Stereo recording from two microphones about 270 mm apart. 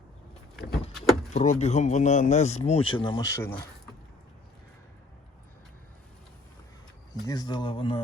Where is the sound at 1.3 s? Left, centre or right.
Left; by 3.7 s centre.